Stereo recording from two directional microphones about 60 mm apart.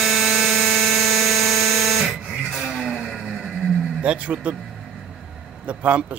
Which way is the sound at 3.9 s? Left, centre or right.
Right.